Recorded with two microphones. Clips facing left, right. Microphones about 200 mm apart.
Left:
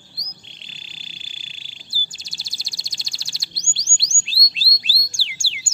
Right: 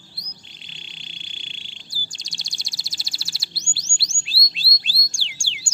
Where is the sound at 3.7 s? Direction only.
5° right (ahead or behind).